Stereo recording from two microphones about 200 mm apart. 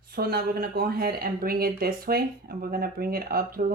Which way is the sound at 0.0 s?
50° right (ahead or behind).